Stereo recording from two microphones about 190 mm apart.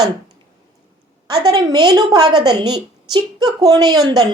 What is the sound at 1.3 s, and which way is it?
A woman's voice, 20° right (ahead or behind).